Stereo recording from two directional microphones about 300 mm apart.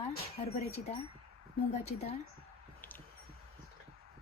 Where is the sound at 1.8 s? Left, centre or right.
Left.